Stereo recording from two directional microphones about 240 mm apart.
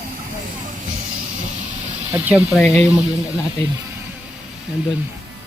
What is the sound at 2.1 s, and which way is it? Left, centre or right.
Speech, centre.